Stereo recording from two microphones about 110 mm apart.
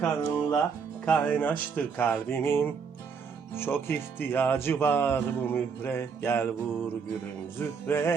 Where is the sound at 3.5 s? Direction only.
20° left (ahead or behind).